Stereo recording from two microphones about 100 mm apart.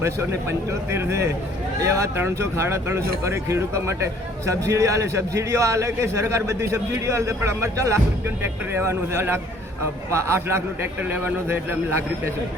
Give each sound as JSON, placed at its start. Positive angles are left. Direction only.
{"t": 0.0, "sound": "speech", "side_deg": -25}